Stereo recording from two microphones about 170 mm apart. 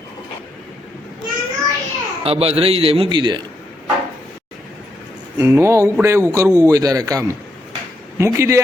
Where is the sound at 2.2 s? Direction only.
35° right (ahead or behind).